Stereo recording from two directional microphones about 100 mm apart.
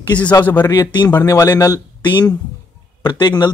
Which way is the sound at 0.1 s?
15° left (ahead or behind).